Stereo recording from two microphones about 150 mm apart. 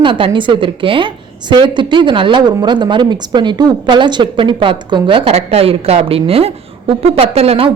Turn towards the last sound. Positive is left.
turn(degrees=-40)  # may be behind; listen again after turning